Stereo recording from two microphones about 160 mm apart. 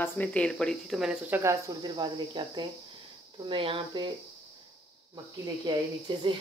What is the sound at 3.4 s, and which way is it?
Speech, 30° right (ahead or behind).